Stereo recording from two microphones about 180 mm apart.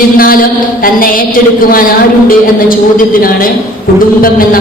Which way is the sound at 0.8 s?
50° left (ahead or behind).